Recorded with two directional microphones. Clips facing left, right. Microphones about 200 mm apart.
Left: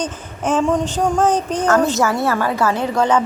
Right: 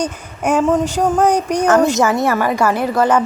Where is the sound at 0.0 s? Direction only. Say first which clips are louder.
Right 3 dB; 10° right (ahead or behind).